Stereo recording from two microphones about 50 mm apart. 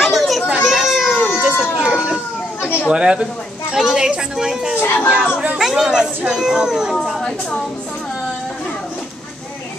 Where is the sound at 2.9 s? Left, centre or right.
Centre.